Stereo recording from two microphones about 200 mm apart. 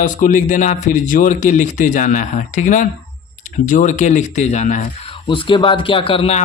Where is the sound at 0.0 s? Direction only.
40° left (ahead or behind).